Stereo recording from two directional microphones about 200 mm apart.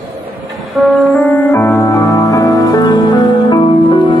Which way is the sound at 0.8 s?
5° left (ahead or behind).